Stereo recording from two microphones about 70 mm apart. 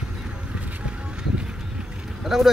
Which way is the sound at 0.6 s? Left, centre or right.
Centre.